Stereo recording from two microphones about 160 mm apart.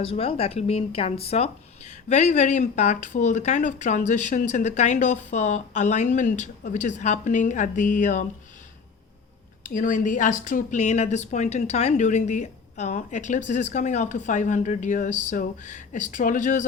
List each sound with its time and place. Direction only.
0.0 s speech: 35° left (ahead or behind); by 8.2 s 50° left (ahead or behind)
9.6 s speech: 55° left (ahead or behind)